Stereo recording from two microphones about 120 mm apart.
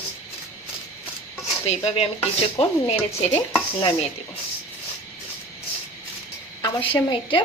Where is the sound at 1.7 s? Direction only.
60° left (ahead or behind).